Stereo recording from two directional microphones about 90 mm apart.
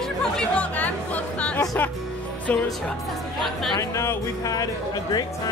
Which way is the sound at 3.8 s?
35° left (ahead or behind).